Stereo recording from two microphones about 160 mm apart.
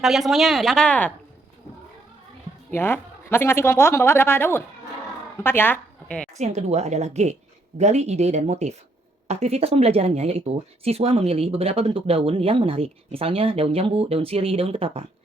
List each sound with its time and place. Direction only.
0.0 s speech: centre (ahead or behind)
2.6 s speech: 15° left (ahead or behind)
6.3 s a woman's voice: 45° right (ahead or behind)